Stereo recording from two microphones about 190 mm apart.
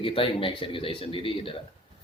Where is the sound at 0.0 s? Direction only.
30° left (ahead or behind).